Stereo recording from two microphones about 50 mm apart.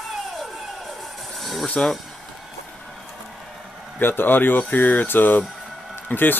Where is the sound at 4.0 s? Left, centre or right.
Left.